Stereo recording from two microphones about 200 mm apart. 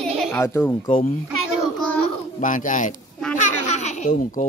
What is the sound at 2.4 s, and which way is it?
Speech, 40° left (ahead or behind).